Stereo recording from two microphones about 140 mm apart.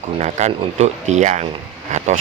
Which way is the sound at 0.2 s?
55° right (ahead or behind).